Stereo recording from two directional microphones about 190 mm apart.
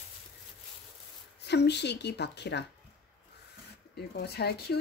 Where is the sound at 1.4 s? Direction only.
60° left (ahead or behind).